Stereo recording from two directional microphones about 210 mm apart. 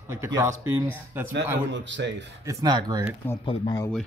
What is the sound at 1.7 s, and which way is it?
Speech, 60° right (ahead or behind).